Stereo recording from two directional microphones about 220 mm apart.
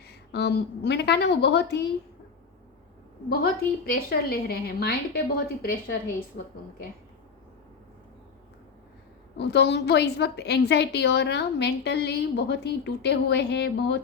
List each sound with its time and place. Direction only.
0.0 s a woman's voice: 50° left (ahead or behind)
3.2 s a woman's voice: 45° left (ahead or behind)
9.4 s a woman's voice: 50° left (ahead or behind)